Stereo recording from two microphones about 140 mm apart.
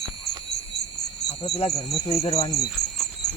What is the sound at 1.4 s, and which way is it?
Speech, 45° left (ahead or behind).